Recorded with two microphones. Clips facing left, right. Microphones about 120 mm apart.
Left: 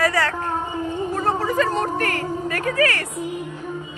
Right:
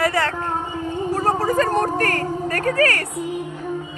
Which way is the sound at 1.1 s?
40° right (ahead or behind).